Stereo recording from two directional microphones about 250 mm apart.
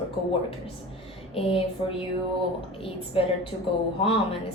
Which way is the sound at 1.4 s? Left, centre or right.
Left.